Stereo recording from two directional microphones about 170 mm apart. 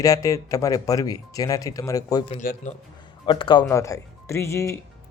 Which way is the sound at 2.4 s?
45° left (ahead or behind).